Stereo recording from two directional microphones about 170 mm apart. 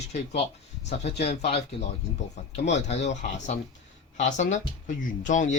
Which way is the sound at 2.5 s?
40° left (ahead or behind).